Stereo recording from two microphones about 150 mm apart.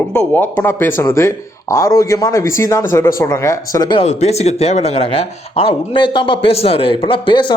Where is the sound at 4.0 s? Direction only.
45° left (ahead or behind).